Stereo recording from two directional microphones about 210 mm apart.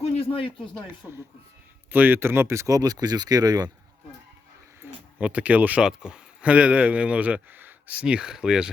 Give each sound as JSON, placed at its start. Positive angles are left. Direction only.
{"t": 0.0, "sound": "a sound", "side_deg": 25}
{"t": 1.9, "sound": "speech", "side_deg": -10}
{"t": 5.2, "sound": "speech", "side_deg": -5}